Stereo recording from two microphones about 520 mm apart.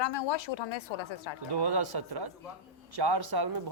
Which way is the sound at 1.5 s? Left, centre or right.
Right.